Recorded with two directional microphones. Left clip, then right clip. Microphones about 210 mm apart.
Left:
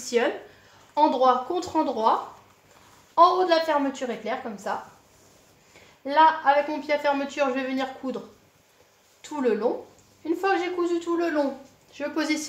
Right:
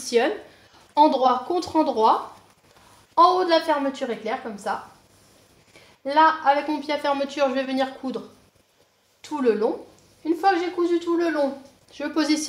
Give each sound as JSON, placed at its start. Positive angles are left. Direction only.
{"t": 0.0, "sound": "speech", "side_deg": -30}
{"t": 3.2, "sound": "speech", "side_deg": -25}
{"t": 6.0, "sound": "speech", "side_deg": -25}
{"t": 9.2, "sound": "speech", "side_deg": -25}